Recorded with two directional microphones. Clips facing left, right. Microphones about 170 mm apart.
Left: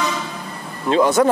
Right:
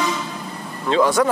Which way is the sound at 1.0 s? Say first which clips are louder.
Left 2 dB; 20° left (ahead or behind).